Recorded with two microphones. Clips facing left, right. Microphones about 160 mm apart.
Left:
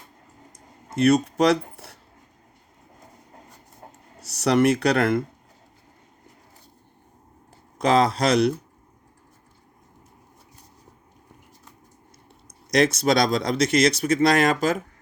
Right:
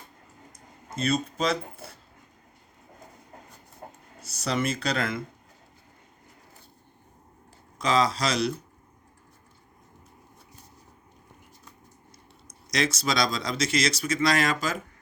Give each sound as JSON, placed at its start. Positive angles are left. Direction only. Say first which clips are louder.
{"t": 0.9, "sound": "speech", "louder": "left 9 dB", "side_deg": 75}
{"t": 4.2, "sound": "speech", "louder": "left 9 dB", "side_deg": 70}
{"t": 7.8, "sound": "speech", "louder": "left 5 dB", "side_deg": 55}
{"t": 12.7, "sound": "speech", "louder": "left 8 dB", "side_deg": 55}